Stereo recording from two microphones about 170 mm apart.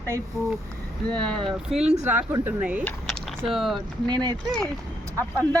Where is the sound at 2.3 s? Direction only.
10° right (ahead or behind).